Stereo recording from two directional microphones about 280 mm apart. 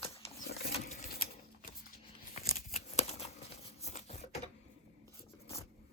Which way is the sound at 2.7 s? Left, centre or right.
Left.